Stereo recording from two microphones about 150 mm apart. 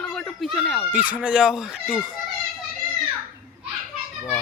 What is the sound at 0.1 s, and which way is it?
Speech, centre (ahead or behind).